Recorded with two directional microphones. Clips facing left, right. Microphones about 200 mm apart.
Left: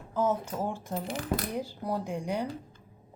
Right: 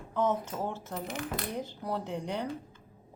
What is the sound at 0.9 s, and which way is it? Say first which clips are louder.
Speech: left 4 dB; 30° left (ahead or behind).